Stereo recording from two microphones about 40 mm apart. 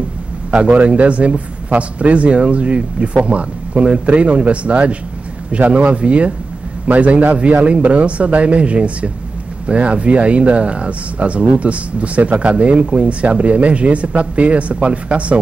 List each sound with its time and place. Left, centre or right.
0.5 s speech: right